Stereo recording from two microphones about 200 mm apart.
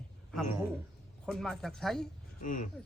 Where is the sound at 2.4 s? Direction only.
40° left (ahead or behind).